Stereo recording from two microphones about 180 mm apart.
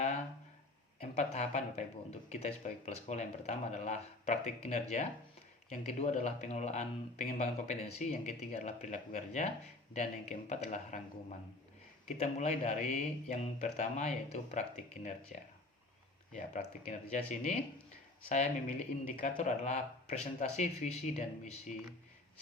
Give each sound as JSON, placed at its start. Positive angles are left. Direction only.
{"t": 1.1, "sound": "speech", "side_deg": 40}
{"t": 18.3, "sound": "speech", "side_deg": 40}